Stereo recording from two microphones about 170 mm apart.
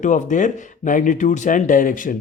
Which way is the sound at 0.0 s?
45° left (ahead or behind).